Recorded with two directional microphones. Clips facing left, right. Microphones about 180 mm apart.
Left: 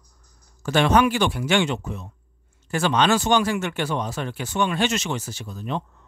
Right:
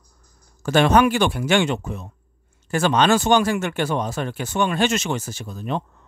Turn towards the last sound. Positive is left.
turn(degrees=-50)  # may be behind; listen again after turning